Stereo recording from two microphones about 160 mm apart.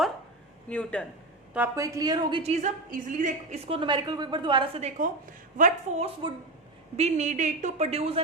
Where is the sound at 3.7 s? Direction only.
30° right (ahead or behind).